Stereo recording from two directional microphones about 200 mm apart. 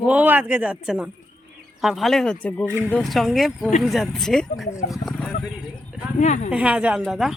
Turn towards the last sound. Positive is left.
turn(degrees=0)  # may be behind; listen again after turning